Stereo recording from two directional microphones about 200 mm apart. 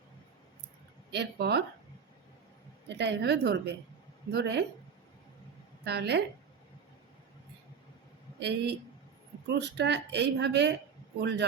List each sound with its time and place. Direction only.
1.1 s speech: 55° right (ahead or behind)
2.9 s speech: 60° right (ahead or behind)
5.8 s speech: 55° right (ahead or behind)
8.4 s speech: 55° right (ahead or behind)